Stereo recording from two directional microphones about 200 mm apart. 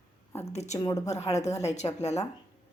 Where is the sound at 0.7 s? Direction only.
15° left (ahead or behind).